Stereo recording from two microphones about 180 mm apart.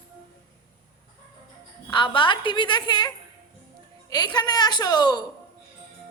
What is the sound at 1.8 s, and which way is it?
A woman's voice, 25° left (ahead or behind).